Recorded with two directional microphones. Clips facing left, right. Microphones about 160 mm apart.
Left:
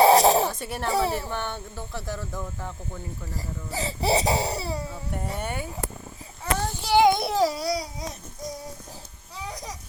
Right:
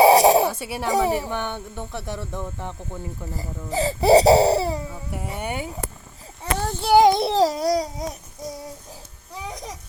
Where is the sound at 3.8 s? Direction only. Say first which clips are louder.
Right 10 dB; 40° right (ahead or behind).